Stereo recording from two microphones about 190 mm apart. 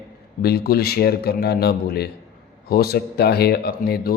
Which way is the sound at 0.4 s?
55° left (ahead or behind).